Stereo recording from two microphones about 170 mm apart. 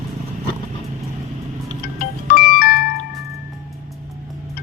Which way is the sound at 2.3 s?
60° left (ahead or behind).